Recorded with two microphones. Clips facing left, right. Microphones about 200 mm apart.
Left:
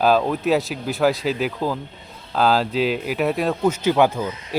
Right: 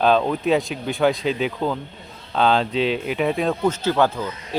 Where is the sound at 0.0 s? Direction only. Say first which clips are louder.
Even; 5° left (ahead or behind).